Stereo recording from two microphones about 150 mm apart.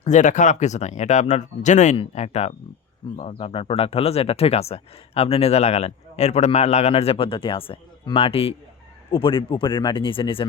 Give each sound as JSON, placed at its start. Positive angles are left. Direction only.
{"t": 0.0, "sound": "speech", "side_deg": 55}